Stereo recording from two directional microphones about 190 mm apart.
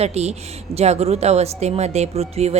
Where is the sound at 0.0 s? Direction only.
35° right (ahead or behind).